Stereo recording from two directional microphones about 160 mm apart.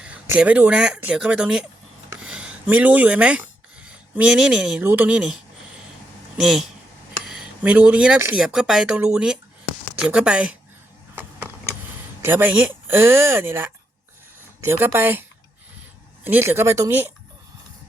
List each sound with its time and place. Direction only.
0.0 s speech: 10° right (ahead or behind)
2.2 s a sound: 5° right (ahead or behind)
4.9 s speech: 10° right (ahead or behind)
12.2 s speech: 15° right (ahead or behind)
16.2 s speech: 15° right (ahead or behind)